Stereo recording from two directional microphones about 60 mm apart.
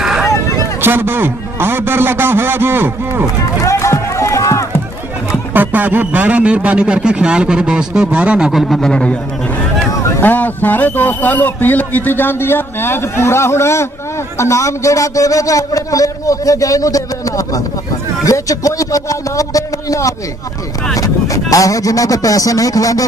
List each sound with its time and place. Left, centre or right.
0.0 s vehicle: centre
0.7 s a man's voice: right
3.6 s run: left
5.5 s a man's voice: right
8.4 s a man's voice: centre
10.2 s a man's voice: left